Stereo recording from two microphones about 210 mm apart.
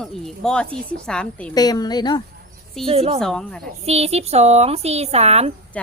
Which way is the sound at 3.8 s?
30° right (ahead or behind).